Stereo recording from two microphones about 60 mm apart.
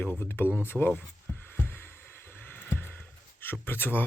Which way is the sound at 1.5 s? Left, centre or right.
Left.